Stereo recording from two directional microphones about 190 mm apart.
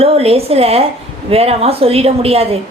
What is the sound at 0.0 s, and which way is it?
A woman's voice, 30° right (ahead or behind).